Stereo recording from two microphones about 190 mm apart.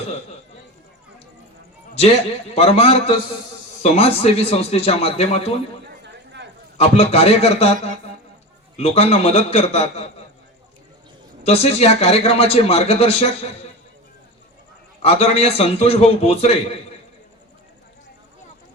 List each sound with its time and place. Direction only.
2.6 s speech: 30° left (ahead or behind)
6.0 s a sound: 65° right (ahead or behind)
6.7 s speech: 30° left (ahead or behind)
11.4 s speech: 35° left (ahead or behind)
15.0 s speech: 30° left (ahead or behind)